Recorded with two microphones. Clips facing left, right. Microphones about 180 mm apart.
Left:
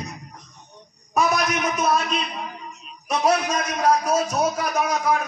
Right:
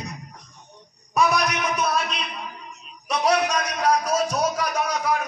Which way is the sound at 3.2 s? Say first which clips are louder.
Even; 45° left (ahead or behind).